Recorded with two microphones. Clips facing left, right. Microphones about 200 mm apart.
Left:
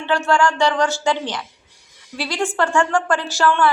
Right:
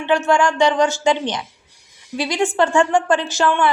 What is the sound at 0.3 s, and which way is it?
A woman's voice, 20° right (ahead or behind).